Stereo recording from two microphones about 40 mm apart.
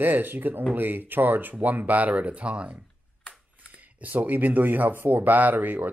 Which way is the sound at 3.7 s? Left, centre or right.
Right.